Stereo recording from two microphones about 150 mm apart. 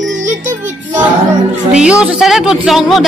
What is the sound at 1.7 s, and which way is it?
Speech, 5° right (ahead or behind).